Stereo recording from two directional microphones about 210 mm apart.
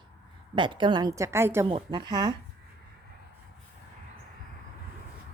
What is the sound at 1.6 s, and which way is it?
Speech, 20° right (ahead or behind).